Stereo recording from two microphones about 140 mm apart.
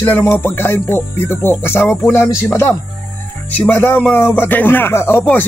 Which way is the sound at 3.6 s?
15° left (ahead or behind).